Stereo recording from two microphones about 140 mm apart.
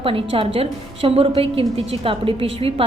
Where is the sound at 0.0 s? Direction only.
40° right (ahead or behind).